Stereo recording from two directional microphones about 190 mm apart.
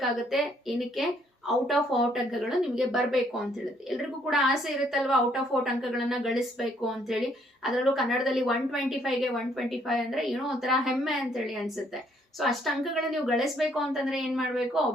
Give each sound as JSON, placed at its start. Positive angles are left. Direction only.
{"t": 0.0, "sound": "a woman's voice", "side_deg": 0}